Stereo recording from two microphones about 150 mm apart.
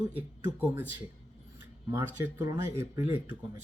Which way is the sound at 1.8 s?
15° right (ahead or behind).